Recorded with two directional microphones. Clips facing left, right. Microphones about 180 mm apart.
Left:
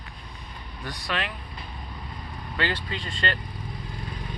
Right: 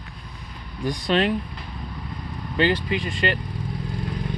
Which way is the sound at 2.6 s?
15° right (ahead or behind).